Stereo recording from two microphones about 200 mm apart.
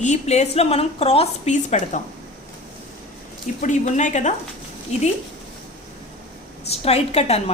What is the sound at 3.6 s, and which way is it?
Speech, 35° left (ahead or behind).